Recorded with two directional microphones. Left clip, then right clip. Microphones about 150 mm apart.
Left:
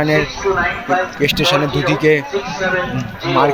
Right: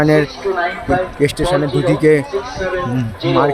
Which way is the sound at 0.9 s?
35° right (ahead or behind).